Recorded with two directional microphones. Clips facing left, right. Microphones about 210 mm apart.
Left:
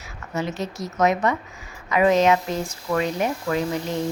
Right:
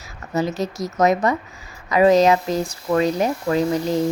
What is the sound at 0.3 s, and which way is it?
A woman's voice, 40° right (ahead or behind).